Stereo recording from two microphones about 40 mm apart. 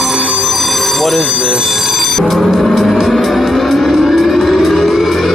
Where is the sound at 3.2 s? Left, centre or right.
Centre.